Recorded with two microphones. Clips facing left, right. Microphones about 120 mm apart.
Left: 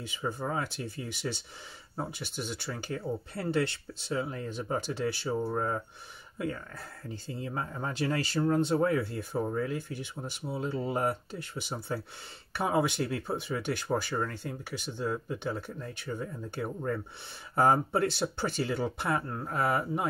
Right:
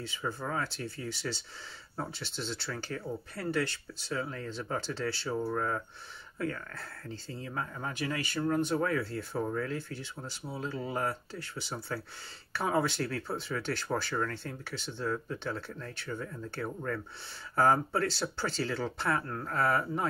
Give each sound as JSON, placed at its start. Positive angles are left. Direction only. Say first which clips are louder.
{"t": 0.0, "sound": "speech", "louder": "left 2 dB", "side_deg": 15}